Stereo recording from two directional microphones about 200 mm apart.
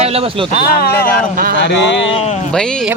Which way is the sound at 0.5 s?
50° left (ahead or behind).